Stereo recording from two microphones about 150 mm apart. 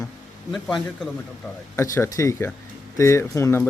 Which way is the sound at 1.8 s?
20° left (ahead or behind).